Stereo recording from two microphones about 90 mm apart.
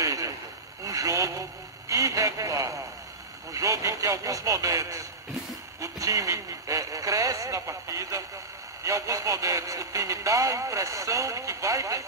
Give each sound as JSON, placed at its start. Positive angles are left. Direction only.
{"t": 0.0, "sound": "vehicle", "side_deg": -40}
{"t": 1.9, "sound": "radio", "side_deg": -35}
{"t": 3.5, "sound": "vehicle", "side_deg": -40}
{"t": 5.8, "sound": "a sound", "side_deg": -40}
{"t": 8.8, "sound": "speech", "side_deg": -35}